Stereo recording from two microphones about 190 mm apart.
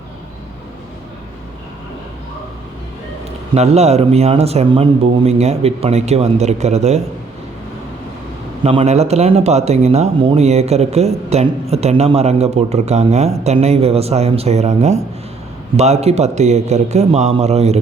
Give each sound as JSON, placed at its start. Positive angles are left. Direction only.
{"t": 3.5, "sound": "speech", "side_deg": -35}
{"t": 8.6, "sound": "speech", "side_deg": -30}